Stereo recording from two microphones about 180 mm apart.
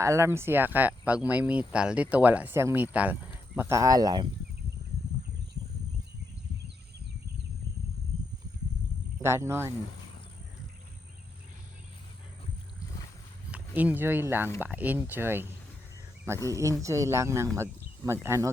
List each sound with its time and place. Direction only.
0.0 s speech: 15° right (ahead or behind)
9.2 s speech: 15° right (ahead or behind)
13.5 s speech: 10° right (ahead or behind)
16.5 s speech: 15° right (ahead or behind)